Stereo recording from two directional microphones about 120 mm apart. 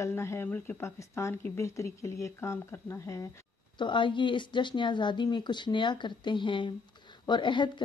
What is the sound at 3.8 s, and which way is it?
Speech, 40° left (ahead or behind).